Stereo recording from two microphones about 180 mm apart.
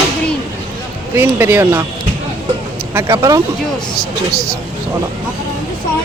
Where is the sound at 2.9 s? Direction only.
20° right (ahead or behind).